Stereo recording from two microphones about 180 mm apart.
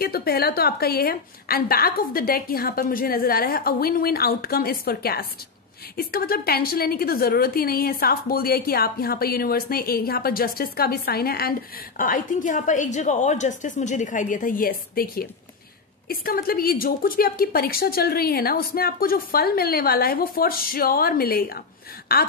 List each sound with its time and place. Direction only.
0.0 s a woman's voice: 60° left (ahead or behind)